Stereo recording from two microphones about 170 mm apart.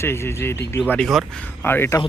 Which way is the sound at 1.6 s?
15° left (ahead or behind).